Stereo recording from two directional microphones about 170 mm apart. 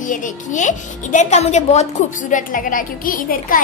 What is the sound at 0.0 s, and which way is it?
A child's voice, 50° left (ahead or behind).